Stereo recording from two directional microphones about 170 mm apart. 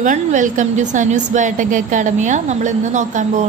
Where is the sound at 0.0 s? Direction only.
50° right (ahead or behind).